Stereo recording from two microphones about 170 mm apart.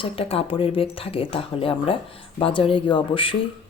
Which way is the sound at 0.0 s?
35° left (ahead or behind).